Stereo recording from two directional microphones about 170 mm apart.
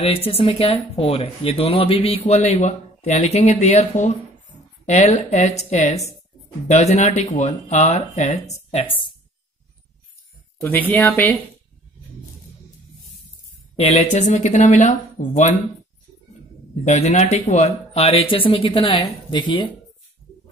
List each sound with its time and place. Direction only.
0.0 s speech: 35° left (ahead or behind)
10.6 s speech: 10° left (ahead or behind)
13.7 s speech: 40° left (ahead or behind)
16.8 s speech: 40° left (ahead or behind)